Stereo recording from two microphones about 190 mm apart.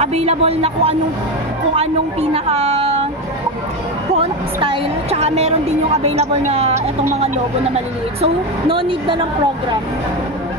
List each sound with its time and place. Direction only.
0.0 s a woman's voice: 35° right (ahead or behind)
2.3 s a woman's voice: 35° right (ahead or behind)
4.1 s a woman's voice: 30° right (ahead or behind)